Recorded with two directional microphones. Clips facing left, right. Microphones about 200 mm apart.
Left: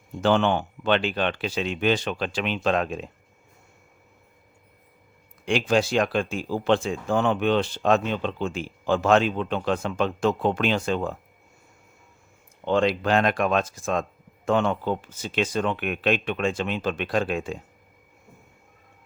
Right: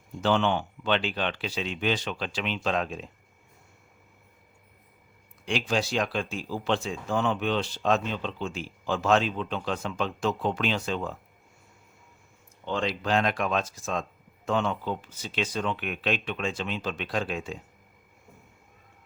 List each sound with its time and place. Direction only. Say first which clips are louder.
0.2 s speech: left 4 dB; 55° left (ahead or behind)
5.5 s speech: left 6 dB; 55° left (ahead or behind)
12.6 s speech: left 7 dB; 60° left (ahead or behind)